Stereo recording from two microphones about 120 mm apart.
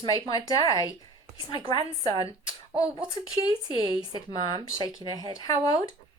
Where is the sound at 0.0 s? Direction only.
30° left (ahead or behind).